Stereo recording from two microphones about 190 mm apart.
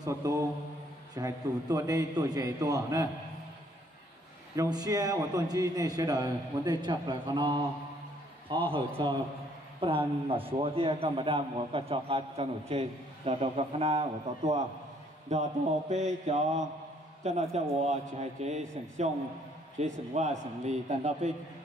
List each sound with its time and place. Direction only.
0.0 s mantra: 15° right (ahead or behind)
1.1 s a man's voice: 20° right (ahead or behind)
4.6 s a man's voice: 20° right (ahead or behind); by 21.3 s 35° right (ahead or behind)